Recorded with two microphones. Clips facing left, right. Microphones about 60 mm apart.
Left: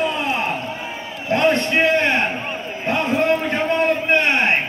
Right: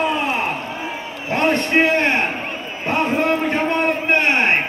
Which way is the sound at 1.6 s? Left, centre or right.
Right.